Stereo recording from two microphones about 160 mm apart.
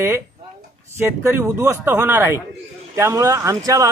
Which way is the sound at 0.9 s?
15° right (ahead or behind).